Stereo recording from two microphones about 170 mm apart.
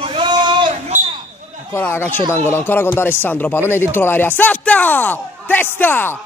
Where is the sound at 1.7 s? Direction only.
15° left (ahead or behind).